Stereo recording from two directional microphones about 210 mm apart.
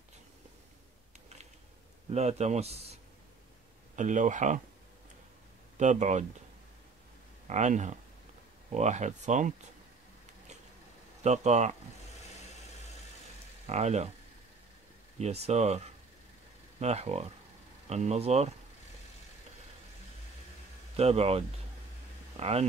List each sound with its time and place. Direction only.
2.0 s speech: 30° right (ahead or behind)
5.8 s speech: 35° right (ahead or behind)
7.4 s speech: 35° right (ahead or behind)
11.2 s speech: 30° right (ahead or behind)
13.7 s speech: 30° right (ahead or behind)
15.1 s speech: 30° right (ahead or behind)
20.9 s speech: 30° right (ahead or behind)